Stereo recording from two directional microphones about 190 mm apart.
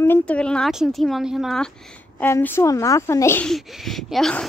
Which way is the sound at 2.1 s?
10° left (ahead or behind).